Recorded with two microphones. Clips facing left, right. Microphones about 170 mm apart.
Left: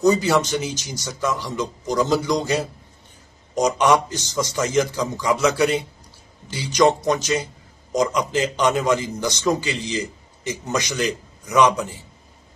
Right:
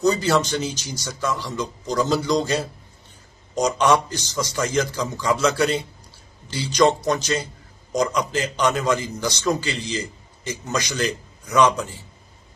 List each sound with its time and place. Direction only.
0.0 s a man's voice: 20° left (ahead or behind)